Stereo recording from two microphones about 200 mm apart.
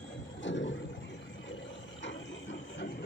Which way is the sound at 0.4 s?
65° left (ahead or behind).